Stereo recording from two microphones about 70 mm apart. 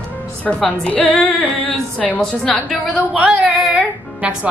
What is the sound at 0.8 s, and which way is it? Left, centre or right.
Female singing, centre.